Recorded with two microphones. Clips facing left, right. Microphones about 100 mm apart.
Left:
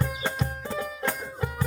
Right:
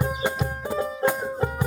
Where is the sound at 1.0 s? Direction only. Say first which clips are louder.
Right 8 dB; 35° right (ahead or behind).